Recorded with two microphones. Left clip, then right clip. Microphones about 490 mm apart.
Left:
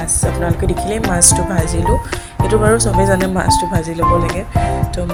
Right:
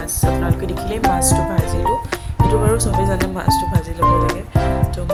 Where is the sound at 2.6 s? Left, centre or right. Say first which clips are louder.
Left 5 dB; right.